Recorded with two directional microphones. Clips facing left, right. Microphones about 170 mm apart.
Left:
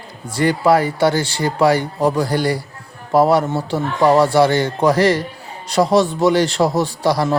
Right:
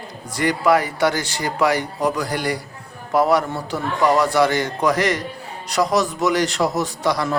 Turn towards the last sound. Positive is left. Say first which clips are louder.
# left 4 dB
turn(degrees=30)  # may be behind; listen again after turning